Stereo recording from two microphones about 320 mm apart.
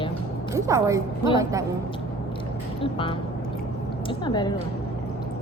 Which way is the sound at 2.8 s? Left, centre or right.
Centre.